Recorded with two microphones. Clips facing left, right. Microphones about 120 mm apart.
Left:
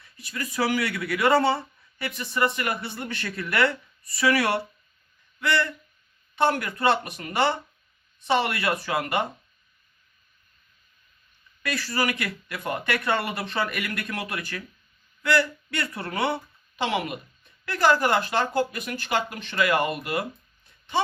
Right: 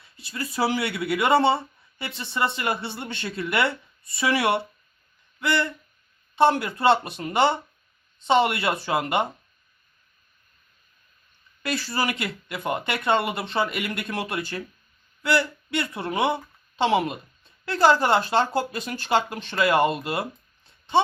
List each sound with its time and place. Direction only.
0.0 s speech: 30° right (ahead or behind)
11.6 s speech: 25° right (ahead or behind)